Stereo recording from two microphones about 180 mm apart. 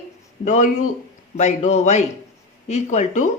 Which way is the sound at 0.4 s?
45° left (ahead or behind).